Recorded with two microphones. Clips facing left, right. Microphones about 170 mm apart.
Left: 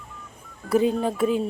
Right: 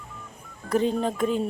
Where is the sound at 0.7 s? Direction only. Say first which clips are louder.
Left 2 dB; 5° left (ahead or behind).